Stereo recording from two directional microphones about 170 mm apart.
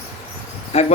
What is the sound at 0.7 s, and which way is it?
Speech, 40° left (ahead or behind).